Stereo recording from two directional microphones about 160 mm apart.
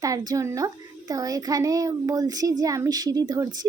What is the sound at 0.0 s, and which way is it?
Speech, 20° right (ahead or behind).